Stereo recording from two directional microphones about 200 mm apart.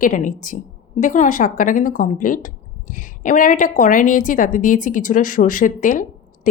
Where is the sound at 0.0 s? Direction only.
40° left (ahead or behind).